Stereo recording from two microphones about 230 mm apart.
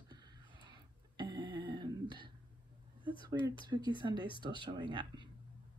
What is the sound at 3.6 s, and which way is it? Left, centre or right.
Speech, centre.